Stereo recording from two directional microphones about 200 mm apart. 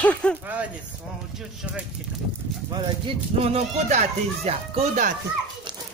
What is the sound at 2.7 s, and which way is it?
Speech, 30° right (ahead or behind).